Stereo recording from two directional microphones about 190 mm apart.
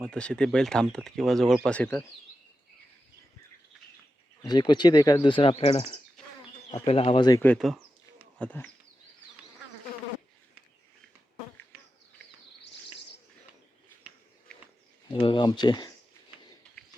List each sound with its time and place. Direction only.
0.0 s speech: 5° left (ahead or behind)
4.4 s speech: 25° left (ahead or behind)
7.4 s speech: 5° left (ahead or behind)
15.1 s speech: 25° left (ahead or behind)